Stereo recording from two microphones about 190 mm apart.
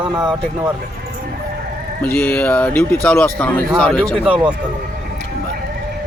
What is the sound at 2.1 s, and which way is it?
Speech, 10° left (ahead or behind).